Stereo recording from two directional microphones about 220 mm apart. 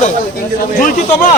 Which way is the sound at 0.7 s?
40° left (ahead or behind).